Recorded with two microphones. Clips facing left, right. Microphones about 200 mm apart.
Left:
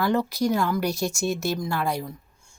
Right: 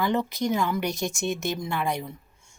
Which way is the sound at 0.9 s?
15° right (ahead or behind).